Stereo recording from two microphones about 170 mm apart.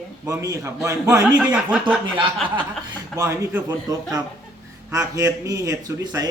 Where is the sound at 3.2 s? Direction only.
15° right (ahead or behind).